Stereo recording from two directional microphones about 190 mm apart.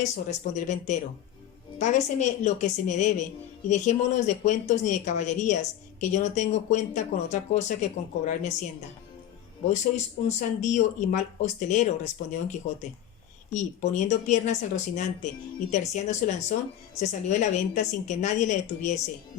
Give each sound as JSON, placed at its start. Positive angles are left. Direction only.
{"t": 0.0, "sound": "speech", "side_deg": 40}
{"t": 9.6, "sound": "speech", "side_deg": 35}